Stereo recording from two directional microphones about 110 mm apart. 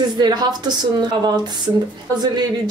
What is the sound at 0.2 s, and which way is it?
Speech, 40° right (ahead or behind).